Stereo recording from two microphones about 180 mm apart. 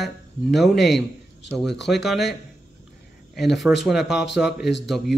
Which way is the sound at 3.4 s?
Centre (ahead or behind).